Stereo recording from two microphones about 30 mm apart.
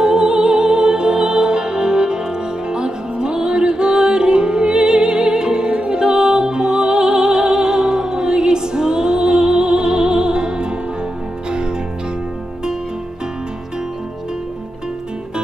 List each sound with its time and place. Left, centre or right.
0.0 s music: right